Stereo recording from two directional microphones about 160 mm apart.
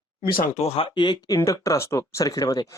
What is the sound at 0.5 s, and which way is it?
Speech, 40° left (ahead or behind).